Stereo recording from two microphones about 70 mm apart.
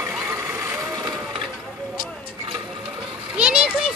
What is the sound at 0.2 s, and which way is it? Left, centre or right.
Vehicle, right.